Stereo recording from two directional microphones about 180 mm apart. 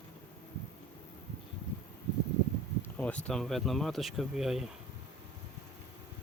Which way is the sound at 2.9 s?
10° left (ahead or behind).